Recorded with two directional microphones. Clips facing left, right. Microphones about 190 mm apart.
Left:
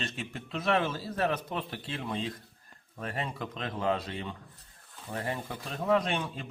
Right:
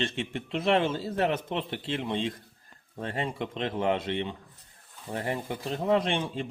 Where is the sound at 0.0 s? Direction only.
25° right (ahead or behind).